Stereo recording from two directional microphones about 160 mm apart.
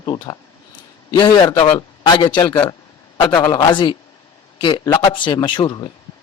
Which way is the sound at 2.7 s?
25° left (ahead or behind).